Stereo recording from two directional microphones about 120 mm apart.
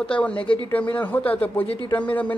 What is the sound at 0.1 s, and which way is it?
Speech, 10° left (ahead or behind).